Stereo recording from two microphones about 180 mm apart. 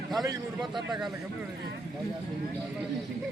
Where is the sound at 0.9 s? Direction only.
Centre (ahead or behind).